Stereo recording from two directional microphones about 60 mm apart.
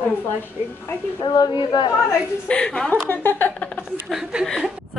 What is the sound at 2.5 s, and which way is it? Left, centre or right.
Speech, centre.